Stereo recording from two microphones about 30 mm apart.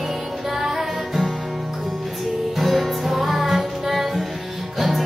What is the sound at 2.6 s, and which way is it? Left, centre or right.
Music, centre.